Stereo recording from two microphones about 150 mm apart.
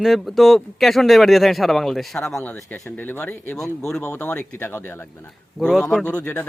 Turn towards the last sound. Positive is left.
turn(degrees=15)  # may be behind; listen again after turning